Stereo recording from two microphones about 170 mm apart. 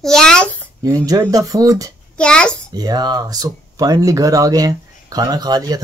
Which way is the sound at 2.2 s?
5° left (ahead or behind).